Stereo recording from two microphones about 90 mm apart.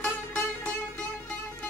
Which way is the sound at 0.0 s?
20° left (ahead or behind).